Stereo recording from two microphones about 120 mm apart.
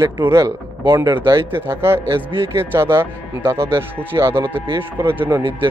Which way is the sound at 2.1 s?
45° right (ahead or behind).